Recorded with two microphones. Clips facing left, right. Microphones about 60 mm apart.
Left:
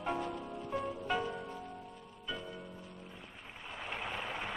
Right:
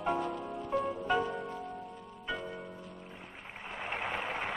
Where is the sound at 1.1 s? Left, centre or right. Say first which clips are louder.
Right 4 dB; right.